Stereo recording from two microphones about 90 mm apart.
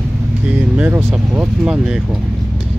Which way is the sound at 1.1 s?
5° right (ahead or behind).